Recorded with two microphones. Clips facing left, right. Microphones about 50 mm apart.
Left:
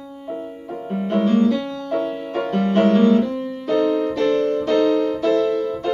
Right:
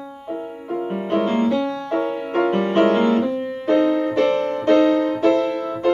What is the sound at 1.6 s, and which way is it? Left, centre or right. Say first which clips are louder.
Music: right 1 dB; right.